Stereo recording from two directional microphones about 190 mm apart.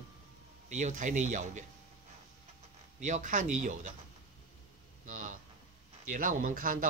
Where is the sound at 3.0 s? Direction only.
40° right (ahead or behind).